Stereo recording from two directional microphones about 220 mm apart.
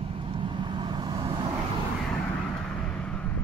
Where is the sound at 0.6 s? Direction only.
20° right (ahead or behind).